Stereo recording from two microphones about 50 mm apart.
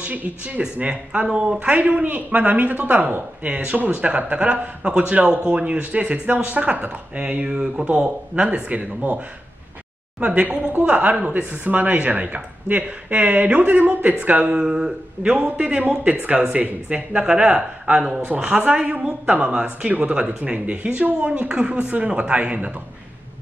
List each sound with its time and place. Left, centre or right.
0.0 s speech: right
7.2 s speech: centre
10.9 s speech: right
15.2 s speech: right
15.5 s speech: right